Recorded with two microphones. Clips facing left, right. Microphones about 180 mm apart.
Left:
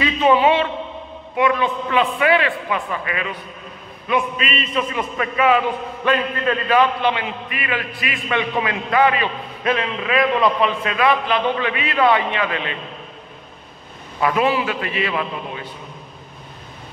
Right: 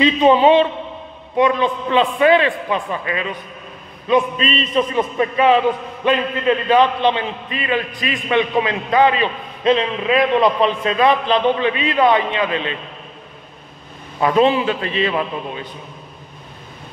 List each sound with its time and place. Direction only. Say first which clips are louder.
0.0 s a sound: right 3 dB; 25° right (ahead or behind)
1.3 s a man's voice: right 3 dB; 25° right (ahead or behind)
14.2 s a man's voice: right 4 dB; 25° right (ahead or behind)